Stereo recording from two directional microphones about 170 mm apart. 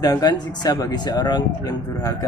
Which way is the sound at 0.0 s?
25° left (ahead or behind).